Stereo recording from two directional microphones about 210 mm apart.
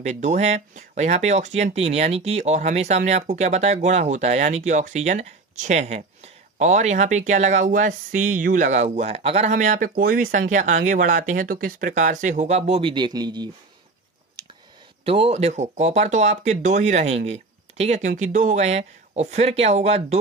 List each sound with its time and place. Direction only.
0.0 s speech: 35° right (ahead or behind)
15.0 s speech: 30° right (ahead or behind)